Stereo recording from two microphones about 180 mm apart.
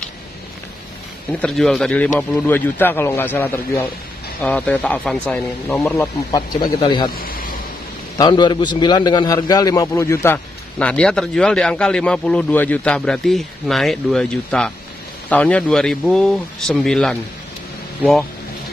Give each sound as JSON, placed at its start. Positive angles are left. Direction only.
{"t": 1.3, "sound": "a man's voice", "side_deg": 5}
{"t": 6.8, "sound": "speech", "side_deg": 25}
{"t": 7.2, "sound": "a sound", "side_deg": 50}
{"t": 8.2, "sound": "a man's voice", "side_deg": 25}